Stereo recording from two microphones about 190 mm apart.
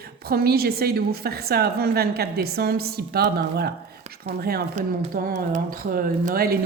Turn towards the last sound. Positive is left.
turn(degrees=-50)  # may be behind; listen again after turning